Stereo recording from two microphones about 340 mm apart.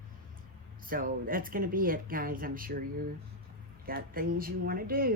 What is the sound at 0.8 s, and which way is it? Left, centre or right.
Speech, right.